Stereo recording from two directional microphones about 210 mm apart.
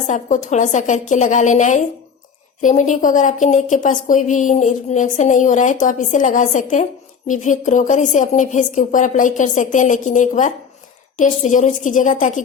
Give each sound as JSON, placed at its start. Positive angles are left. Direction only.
{"t": 0.1, "sound": "a woman's voice", "side_deg": 35}